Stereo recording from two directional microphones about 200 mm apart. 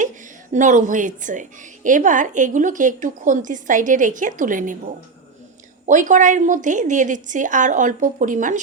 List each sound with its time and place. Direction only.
0.5 s a woman's voice: 35° right (ahead or behind)
5.8 s a woman's voice: 40° right (ahead or behind)